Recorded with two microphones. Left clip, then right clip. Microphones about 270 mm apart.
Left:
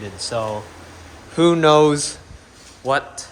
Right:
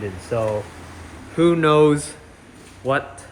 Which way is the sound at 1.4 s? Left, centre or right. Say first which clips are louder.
Left 2 dB; centre.